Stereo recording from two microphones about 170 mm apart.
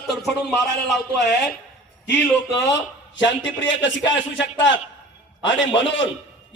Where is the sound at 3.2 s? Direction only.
90° left.